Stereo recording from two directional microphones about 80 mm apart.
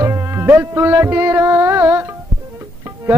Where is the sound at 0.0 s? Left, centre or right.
Right.